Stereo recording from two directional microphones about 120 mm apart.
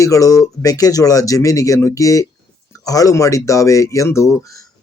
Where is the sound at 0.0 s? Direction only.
30° left (ahead or behind).